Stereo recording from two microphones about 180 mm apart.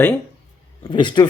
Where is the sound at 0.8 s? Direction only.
25° left (ahead or behind).